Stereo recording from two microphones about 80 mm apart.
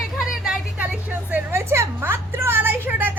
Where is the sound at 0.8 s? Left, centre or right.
Centre.